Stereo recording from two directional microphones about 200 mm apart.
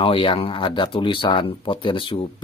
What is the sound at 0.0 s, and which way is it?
Speech, 25° left (ahead or behind).